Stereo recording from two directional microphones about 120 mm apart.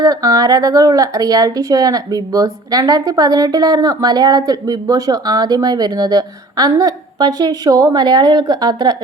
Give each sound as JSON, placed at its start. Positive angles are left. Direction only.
{"t": 0.0, "sound": "speech", "side_deg": -30}